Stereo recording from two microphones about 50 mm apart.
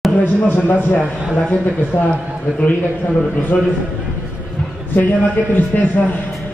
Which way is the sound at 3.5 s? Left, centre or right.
Left.